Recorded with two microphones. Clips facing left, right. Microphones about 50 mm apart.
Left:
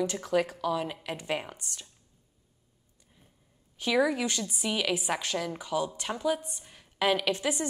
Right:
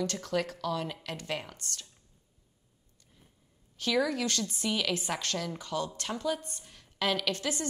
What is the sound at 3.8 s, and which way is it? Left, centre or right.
A woman's voice, centre.